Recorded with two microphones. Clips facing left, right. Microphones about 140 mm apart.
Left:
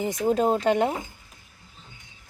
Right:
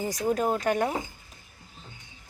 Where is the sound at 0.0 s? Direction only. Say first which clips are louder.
Left 4 dB; 25° left (ahead or behind).